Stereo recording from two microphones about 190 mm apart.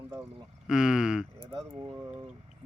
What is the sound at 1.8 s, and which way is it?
Speech, 25° right (ahead or behind).